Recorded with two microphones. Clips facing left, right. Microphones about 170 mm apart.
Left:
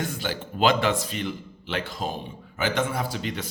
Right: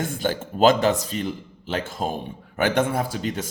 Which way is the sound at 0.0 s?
50° right (ahead or behind).